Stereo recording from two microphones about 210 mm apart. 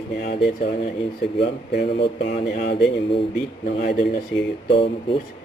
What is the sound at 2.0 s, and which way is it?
Speech, 25° left (ahead or behind).